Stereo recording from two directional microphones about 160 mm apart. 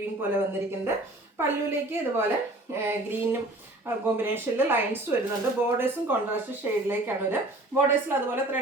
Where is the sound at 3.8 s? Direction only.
15° right (ahead or behind).